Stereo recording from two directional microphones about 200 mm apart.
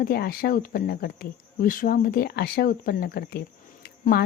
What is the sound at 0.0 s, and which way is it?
A woman's voice, 50° left (ahead or behind).